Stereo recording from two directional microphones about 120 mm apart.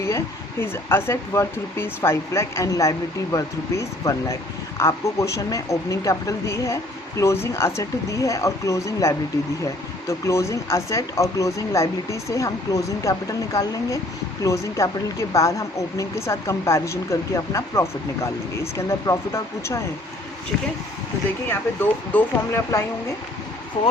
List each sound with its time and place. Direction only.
0.6 s speech: 20° left (ahead or behind)
21.5 s speech: 15° left (ahead or behind)